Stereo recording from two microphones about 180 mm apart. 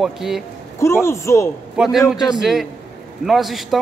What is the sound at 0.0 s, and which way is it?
Speech, centre (ahead or behind).